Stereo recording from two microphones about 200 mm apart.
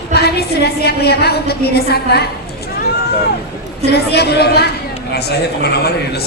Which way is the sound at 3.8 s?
55° left (ahead or behind).